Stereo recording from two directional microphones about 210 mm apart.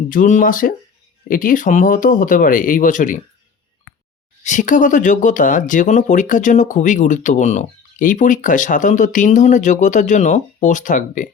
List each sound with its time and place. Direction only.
0.1 s speech: 40° left (ahead or behind)
4.4 s speech: 35° left (ahead or behind)